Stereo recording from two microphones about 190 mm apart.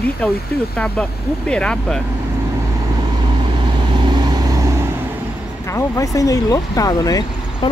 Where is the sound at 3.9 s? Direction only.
25° right (ahead or behind).